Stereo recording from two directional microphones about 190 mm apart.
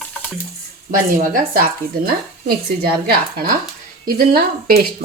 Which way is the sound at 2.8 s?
55° right (ahead or behind).